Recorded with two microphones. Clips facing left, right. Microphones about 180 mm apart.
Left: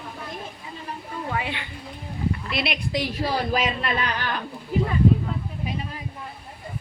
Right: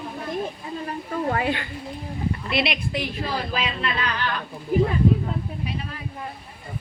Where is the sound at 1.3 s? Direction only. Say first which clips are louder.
Right 4 dB; 45° right (ahead or behind).